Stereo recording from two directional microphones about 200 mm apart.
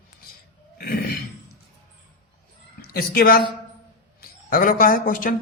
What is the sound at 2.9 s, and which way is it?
A man's voice, 50° left (ahead or behind).